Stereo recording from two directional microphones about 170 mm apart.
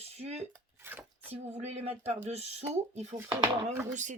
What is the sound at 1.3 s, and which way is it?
Speech, 40° right (ahead or behind).